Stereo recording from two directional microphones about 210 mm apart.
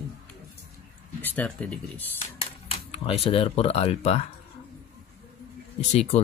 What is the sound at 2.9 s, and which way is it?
Speech, 30° left (ahead or behind).